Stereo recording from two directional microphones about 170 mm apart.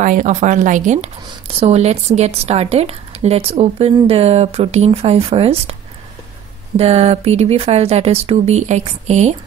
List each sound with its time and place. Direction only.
0.0 s speech: 50° right (ahead or behind)
6.8 s speech: 35° right (ahead or behind)